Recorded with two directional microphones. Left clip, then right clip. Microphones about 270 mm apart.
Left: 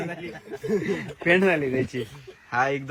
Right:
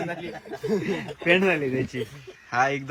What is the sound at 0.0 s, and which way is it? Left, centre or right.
Speech, right.